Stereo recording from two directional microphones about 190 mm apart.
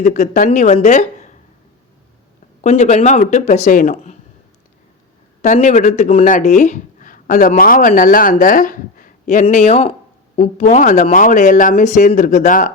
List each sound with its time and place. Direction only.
0.0 s speech: 40° left (ahead or behind)
2.6 s speech: 35° left (ahead or behind)
5.4 s speech: 40° left (ahead or behind)